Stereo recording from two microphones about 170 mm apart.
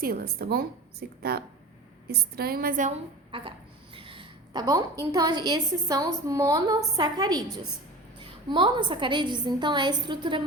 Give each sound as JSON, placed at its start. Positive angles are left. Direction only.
{"t": 0.0, "sound": "a woman's voice", "side_deg": -60}
{"t": 3.3, "sound": "speech", "side_deg": -30}
{"t": 3.9, "sound": "a sound", "side_deg": -30}
{"t": 5.5, "sound": "a woman's voice", "side_deg": -20}